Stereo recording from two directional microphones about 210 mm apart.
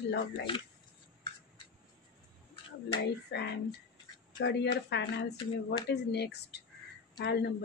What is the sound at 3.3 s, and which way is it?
Speech, 55° left (ahead or behind).